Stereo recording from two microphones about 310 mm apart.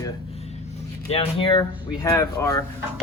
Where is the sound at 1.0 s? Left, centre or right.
Centre.